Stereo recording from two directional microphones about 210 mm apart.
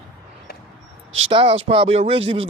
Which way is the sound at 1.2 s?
25° right (ahead or behind).